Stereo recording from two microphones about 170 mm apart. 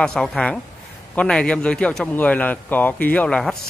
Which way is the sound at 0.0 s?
5° left (ahead or behind).